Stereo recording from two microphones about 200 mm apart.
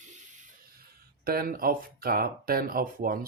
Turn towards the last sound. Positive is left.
turn(degrees=-45)  # may be behind; listen again after turning